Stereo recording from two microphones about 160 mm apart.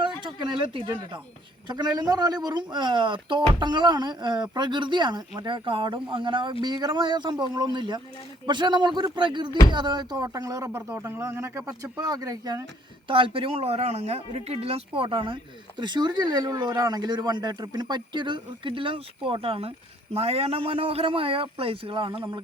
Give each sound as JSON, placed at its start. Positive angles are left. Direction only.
{"t": 0.0, "sound": "a sound", "side_deg": -30}
{"t": 1.6, "sound": "speech", "side_deg": -25}
{"t": 13.1, "sound": "speech", "side_deg": -30}